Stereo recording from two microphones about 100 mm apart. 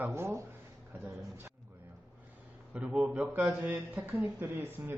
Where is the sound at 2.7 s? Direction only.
10° right (ahead or behind).